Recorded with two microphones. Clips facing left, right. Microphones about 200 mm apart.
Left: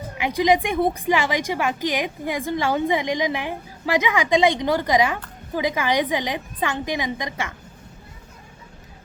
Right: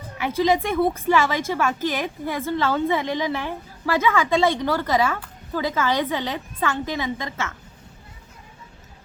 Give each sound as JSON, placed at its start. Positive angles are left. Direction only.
{"t": 0.2, "sound": "a woman's voice", "side_deg": 15}